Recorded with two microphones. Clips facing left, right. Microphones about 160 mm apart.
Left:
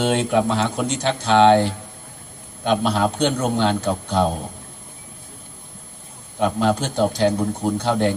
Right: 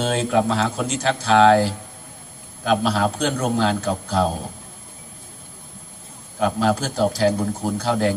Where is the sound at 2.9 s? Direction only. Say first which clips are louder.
Left 2 dB; 30° left (ahead or behind).